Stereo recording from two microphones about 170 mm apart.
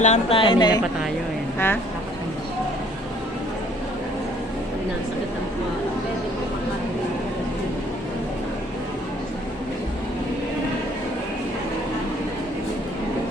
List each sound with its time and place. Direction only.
0.0 s speech: 40° left (ahead or behind)
1.5 s speech: 10° left (ahead or behind)